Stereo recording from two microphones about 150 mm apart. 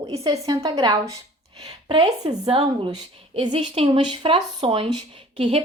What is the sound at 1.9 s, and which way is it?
A woman's voice, 40° right (ahead or behind).